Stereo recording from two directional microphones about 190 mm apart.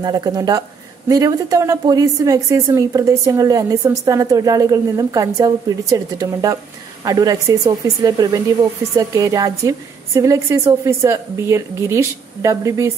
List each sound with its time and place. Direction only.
0.0 s a woman's voice: 20° right (ahead or behind)